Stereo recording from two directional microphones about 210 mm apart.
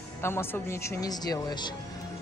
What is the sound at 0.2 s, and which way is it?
Speech, 10° left (ahead or behind).